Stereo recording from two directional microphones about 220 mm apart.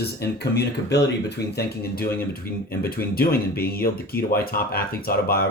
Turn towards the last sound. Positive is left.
turn(degrees=45)  # may be behind; listen again after turning